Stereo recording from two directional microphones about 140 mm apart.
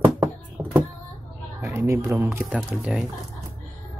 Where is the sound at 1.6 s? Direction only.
20° right (ahead or behind).